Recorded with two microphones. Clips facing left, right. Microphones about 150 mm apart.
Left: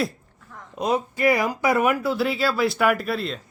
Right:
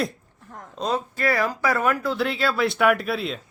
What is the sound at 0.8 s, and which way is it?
Speech, 15° left (ahead or behind).